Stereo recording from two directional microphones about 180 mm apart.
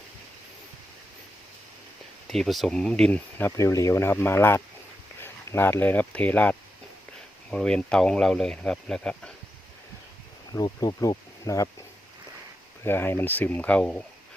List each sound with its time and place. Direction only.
2.2 s speech: centre (ahead or behind)
10.5 s speech: 20° left (ahead or behind)
12.8 s speech: 10° left (ahead or behind)